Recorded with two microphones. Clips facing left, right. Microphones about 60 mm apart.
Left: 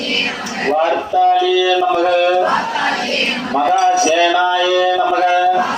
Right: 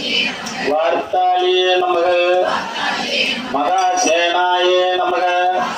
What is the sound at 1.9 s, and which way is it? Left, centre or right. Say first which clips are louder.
Music: left 1 dB; centre.